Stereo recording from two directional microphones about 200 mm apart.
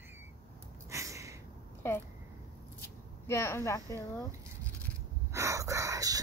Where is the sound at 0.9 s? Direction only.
15° right (ahead or behind).